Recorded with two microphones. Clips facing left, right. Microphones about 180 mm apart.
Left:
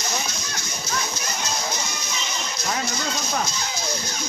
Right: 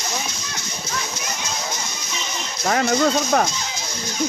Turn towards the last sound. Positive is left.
turn(degrees=-80)